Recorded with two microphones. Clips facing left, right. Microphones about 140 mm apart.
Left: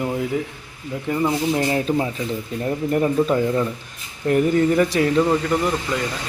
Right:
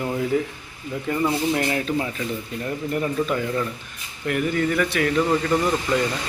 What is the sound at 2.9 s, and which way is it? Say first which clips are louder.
Speech: left 5 dB; 35° left (ahead or behind).